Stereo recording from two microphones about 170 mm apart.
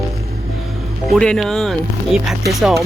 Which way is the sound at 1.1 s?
Centre (ahead or behind).